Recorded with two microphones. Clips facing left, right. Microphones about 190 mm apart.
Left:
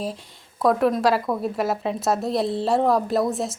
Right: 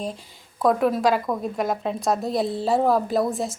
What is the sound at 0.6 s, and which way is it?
Speech, centre (ahead or behind).